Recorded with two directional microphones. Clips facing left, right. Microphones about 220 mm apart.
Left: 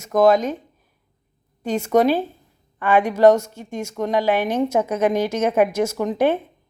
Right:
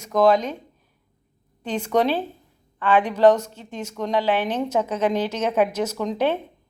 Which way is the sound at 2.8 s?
10° left (ahead or behind).